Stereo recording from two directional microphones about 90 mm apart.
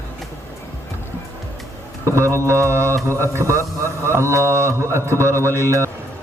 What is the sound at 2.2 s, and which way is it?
A man's voice, 30° right (ahead or behind).